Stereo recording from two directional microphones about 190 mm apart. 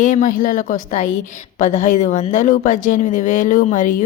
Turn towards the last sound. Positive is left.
turn(degrees=45)  # may be behind; listen again after turning